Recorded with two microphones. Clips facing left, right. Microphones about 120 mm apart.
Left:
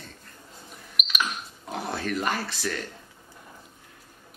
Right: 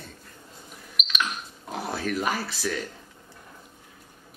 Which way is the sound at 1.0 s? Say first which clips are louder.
Even; 5° left (ahead or behind).